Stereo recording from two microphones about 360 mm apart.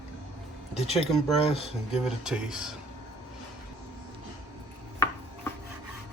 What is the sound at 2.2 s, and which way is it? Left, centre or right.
Speech, centre.